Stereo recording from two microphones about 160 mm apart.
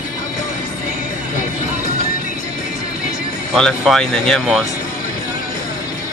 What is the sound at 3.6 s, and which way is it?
Speech, 5° left (ahead or behind).